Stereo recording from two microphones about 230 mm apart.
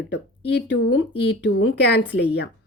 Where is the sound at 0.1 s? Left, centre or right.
Left.